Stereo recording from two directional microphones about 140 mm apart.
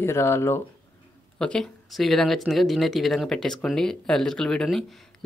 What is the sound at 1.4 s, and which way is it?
Speech, 5° left (ahead or behind).